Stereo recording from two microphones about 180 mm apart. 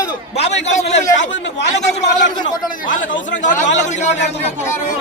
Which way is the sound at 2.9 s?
45° left (ahead or behind).